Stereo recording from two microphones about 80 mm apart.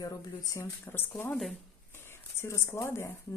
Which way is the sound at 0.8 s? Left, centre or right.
Left.